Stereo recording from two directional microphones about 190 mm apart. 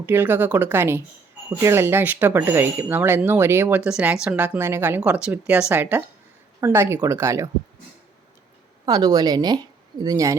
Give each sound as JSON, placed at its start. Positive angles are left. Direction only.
{"t": 0.0, "sound": "speech", "side_deg": -10}
{"t": 8.9, "sound": "a woman's voice", "side_deg": -20}